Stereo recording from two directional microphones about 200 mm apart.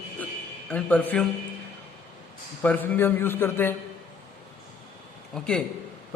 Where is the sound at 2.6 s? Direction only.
10° left (ahead or behind).